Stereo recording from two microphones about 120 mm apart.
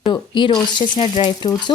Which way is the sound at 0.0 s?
40° left (ahead or behind).